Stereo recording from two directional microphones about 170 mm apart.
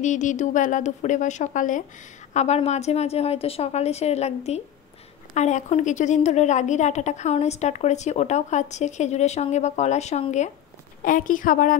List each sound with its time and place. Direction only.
0.0 s a woman's voice: 45° left (ahead or behind)
5.3 s a woman's voice: 45° left (ahead or behind)
11.0 s a woman's voice: 55° left (ahead or behind)